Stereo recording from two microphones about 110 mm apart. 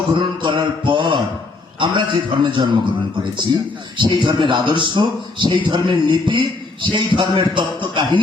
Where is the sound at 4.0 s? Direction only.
50° right (ahead or behind).